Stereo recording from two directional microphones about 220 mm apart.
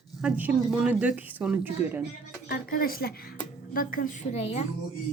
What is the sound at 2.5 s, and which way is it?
A woman's voice, 40° left (ahead or behind).